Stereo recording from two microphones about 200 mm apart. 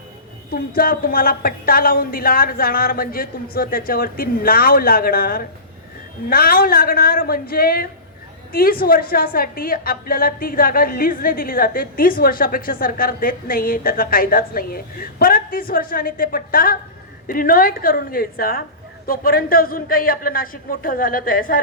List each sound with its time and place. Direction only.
0.8 s a woman's voice: 45° left (ahead or behind)